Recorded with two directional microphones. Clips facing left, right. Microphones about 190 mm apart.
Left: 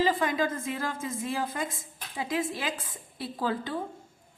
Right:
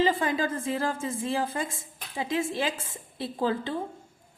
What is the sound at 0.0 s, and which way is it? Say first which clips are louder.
A woman's voice: right 1 dB; 30° right (ahead or behind).